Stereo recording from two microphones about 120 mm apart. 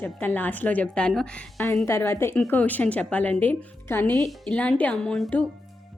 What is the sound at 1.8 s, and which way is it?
A woman's voice, 20° left (ahead or behind).